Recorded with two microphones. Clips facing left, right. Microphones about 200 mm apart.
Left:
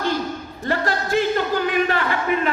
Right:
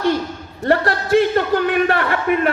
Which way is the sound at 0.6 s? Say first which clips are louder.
Right 6 dB; 65° right (ahead or behind).